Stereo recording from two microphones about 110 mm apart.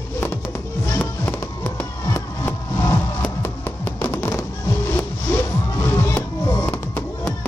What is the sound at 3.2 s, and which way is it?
Music, 20° left (ahead or behind).